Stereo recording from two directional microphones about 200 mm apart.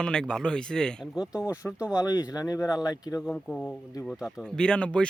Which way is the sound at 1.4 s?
15° left (ahead or behind).